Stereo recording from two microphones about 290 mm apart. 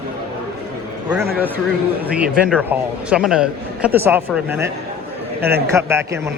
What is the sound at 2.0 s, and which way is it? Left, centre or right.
A man's voice, centre.